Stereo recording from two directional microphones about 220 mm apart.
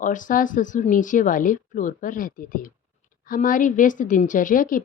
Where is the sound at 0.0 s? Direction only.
35° left (ahead or behind).